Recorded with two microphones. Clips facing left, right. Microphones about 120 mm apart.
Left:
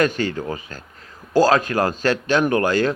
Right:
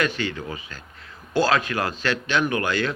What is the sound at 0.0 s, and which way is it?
Speech, 45° left (ahead or behind).